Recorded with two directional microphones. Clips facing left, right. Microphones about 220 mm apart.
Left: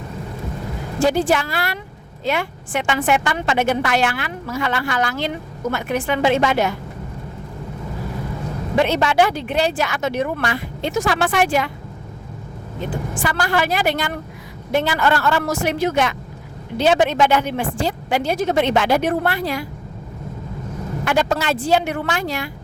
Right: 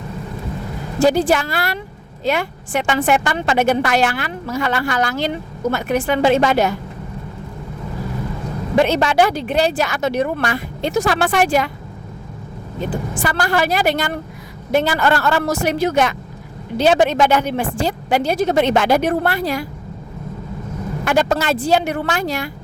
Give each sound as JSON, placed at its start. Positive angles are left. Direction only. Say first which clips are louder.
{"t": 0.9, "sound": "a woman's voice", "louder": "right 3 dB", "side_deg": -40}
{"t": 8.8, "sound": "a woman's voice", "louder": "right 2 dB", "side_deg": -40}
{"t": 13.1, "sound": "a woman's voice", "louder": "right 2 dB", "side_deg": -40}
{"t": 21.0, "sound": "a woman's voice", "louder": "right 2 dB", "side_deg": -45}